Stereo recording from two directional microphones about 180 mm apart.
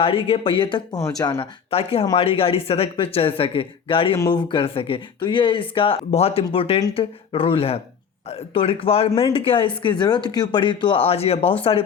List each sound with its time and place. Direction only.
0.0 s speech: 30° left (ahead or behind)